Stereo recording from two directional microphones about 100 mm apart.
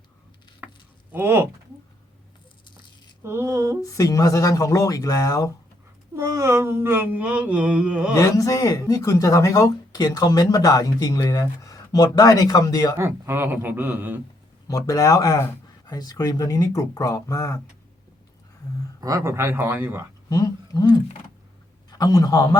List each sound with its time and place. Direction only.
0.6 s a sound: 15° right (ahead or behind)
1.1 s a man's voice: 25° right (ahead or behind)
3.2 s a man's voice: 30° right (ahead or behind)
3.8 s speech: 35° left (ahead or behind)
6.1 s mantra: 30° right (ahead or behind); by 8.1 s 10° right (ahead or behind)
8.1 s speech: 35° left (ahead or behind)
13.0 s a man's voice: 25° right (ahead or behind)
14.7 s speech: 35° left (ahead or behind)
18.9 s a man's voice: 35° right (ahead or behind)
20.3 s a man's voice: 40° left (ahead or behind)